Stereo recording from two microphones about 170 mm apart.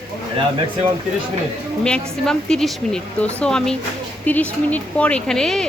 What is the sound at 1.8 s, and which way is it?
Speech, 5° left (ahead or behind).